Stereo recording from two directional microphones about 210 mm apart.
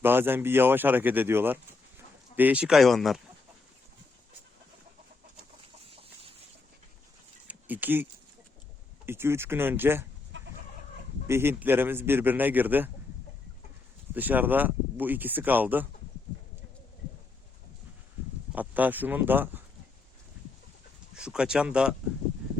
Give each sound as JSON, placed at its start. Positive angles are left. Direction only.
{"t": 0.0, "sound": "speech", "side_deg": -10}
{"t": 5.8, "sound": "chicken", "side_deg": -25}
{"t": 7.4, "sound": "a sound", "side_deg": -10}
{"t": 9.0, "sound": "speech", "side_deg": -10}
{"t": 10.3, "sound": "chicken", "side_deg": -60}
{"t": 11.3, "sound": "speech", "side_deg": -10}
{"t": 14.1, "sound": "speech", "side_deg": -10}
{"t": 18.5, "sound": "speech", "side_deg": -10}
{"t": 21.2, "sound": "speech", "side_deg": -5}